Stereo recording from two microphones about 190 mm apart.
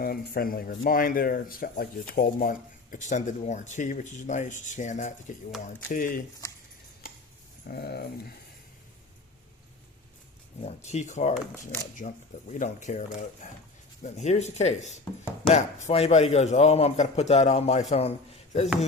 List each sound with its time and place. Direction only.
0.0 s speech: 50° left (ahead or behind)
7.7 s dog: 55° left (ahead or behind)
10.7 s speech: 35° left (ahead or behind)